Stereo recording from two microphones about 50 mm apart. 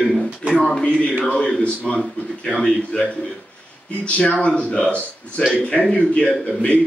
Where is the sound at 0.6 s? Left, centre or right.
Centre.